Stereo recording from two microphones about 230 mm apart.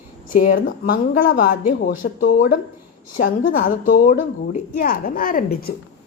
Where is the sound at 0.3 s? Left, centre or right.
Left.